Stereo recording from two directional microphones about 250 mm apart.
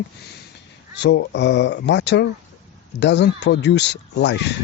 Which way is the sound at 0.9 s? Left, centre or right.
Left.